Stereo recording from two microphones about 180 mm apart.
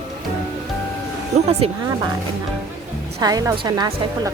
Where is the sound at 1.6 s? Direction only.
30° right (ahead or behind).